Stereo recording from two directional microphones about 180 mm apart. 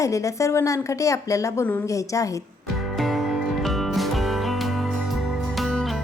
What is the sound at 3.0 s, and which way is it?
Music, centre (ahead or behind).